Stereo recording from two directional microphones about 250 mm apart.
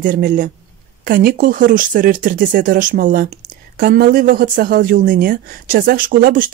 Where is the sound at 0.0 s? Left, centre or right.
Right.